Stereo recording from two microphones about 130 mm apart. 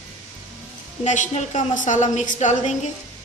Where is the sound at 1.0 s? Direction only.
65° left (ahead or behind).